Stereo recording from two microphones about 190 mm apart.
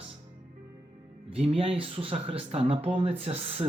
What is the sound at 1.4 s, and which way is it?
Speech, 30° right (ahead or behind).